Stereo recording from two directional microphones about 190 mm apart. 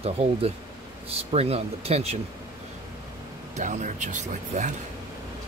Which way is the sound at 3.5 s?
40° right (ahead or behind).